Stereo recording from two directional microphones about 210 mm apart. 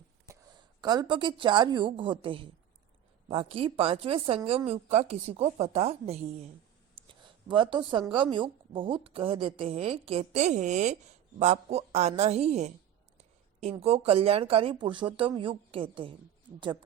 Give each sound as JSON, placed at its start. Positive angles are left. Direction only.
{"t": 0.3, "sound": "a woman's voice", "side_deg": -20}
{"t": 6.9, "sound": "a sound", "side_deg": -25}
{"t": 8.1, "sound": "a woman's voice", "side_deg": -25}